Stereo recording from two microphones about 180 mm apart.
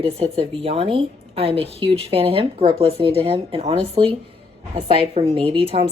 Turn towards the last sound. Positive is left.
turn(degrees=-35)  # may be behind; listen again after turning